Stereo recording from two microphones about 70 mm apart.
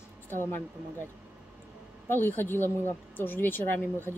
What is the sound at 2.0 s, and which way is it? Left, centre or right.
Speech, left.